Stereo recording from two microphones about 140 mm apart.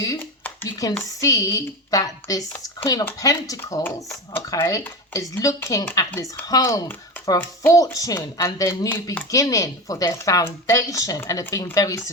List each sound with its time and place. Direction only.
0.4 s a sound: 20° left (ahead or behind)
1.2 s a woman's voice: 20° left (ahead or behind)
6.1 s speech: 15° left (ahead or behind)
6.5 s a woman's voice: 25° left (ahead or behind)